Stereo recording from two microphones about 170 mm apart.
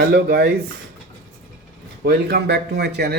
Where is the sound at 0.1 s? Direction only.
60° right (ahead or behind).